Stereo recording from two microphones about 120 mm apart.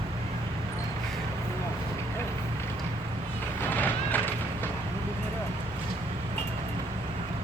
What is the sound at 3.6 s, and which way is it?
Music, 15° left (ahead or behind).